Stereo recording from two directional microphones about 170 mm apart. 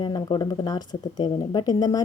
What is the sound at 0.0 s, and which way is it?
Speech, 25° left (ahead or behind).